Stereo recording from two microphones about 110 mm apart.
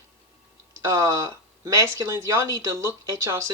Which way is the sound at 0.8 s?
25° right (ahead or behind).